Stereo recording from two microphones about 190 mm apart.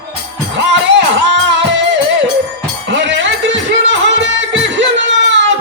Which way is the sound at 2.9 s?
70° right (ahead or behind).